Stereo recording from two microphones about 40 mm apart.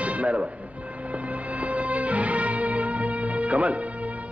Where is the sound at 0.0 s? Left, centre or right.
Right.